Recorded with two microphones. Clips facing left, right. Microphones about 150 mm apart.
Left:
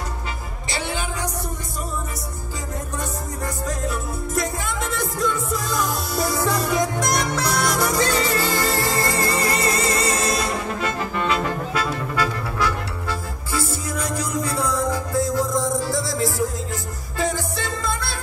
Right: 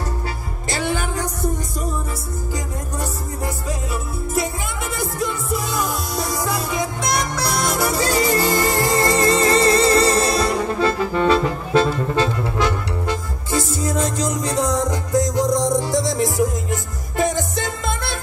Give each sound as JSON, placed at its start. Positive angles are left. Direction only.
{"t": 0.7, "sound": "music", "side_deg": -50}
{"t": 7.6, "sound": "music", "side_deg": 0}
{"t": 7.9, "sound": "music", "side_deg": -35}
{"t": 8.5, "sound": "music", "side_deg": -20}